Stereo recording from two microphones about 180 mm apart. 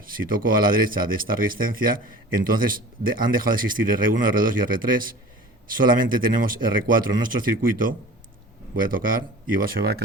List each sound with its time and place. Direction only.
0.0 s speech: 50° right (ahead or behind)
6.2 s speech: 50° right (ahead or behind)